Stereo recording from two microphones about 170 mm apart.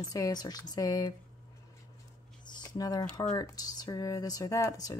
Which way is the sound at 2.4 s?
25° left (ahead or behind).